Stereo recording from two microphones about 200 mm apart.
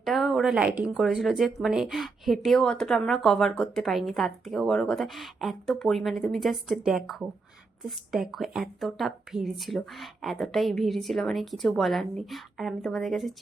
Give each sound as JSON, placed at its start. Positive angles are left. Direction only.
{"t": 0.0, "sound": "speech", "side_deg": 0}